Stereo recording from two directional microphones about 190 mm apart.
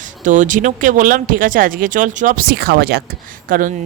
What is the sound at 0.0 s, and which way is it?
Speech, 40° right (ahead or behind).